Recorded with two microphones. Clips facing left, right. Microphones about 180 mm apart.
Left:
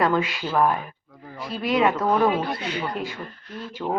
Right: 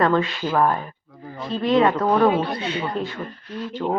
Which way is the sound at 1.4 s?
10° left (ahead or behind).